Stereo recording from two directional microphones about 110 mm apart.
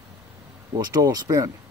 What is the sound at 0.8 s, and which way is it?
Speech, 35° right (ahead or behind).